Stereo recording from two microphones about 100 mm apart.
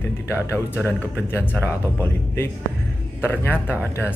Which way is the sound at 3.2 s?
20° left (ahead or behind).